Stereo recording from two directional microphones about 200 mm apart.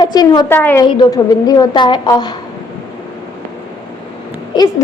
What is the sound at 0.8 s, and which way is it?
A woman's voice, 20° left (ahead or behind).